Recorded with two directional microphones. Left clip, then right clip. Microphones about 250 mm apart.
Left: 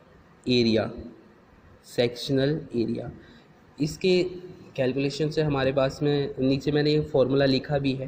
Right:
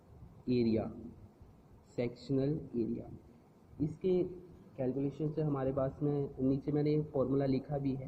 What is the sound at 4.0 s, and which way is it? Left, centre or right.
Speech, left.